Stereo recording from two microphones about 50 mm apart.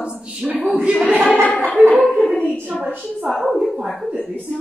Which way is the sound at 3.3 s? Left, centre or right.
Centre.